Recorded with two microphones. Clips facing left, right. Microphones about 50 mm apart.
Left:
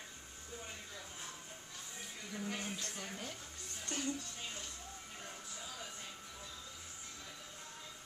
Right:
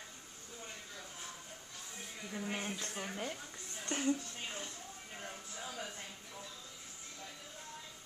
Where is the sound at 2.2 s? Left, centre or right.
Centre.